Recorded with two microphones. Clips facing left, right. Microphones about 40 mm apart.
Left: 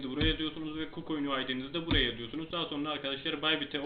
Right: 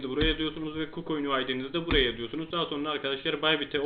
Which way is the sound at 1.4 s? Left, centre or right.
Centre.